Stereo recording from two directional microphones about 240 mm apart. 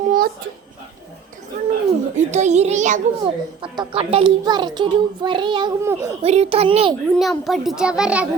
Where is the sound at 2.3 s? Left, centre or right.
Right; by 6.1 s centre.